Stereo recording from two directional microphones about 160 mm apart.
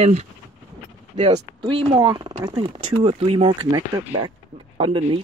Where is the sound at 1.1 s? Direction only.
40° right (ahead or behind).